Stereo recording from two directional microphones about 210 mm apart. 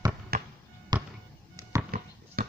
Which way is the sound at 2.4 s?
45° right (ahead or behind).